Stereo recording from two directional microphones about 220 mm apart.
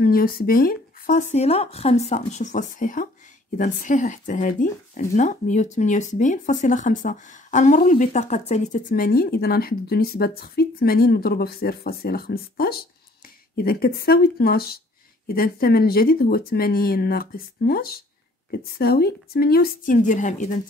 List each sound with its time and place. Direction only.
0.0 s speech: 40° left (ahead or behind)